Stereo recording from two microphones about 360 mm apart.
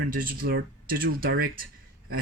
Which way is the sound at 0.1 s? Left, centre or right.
Right.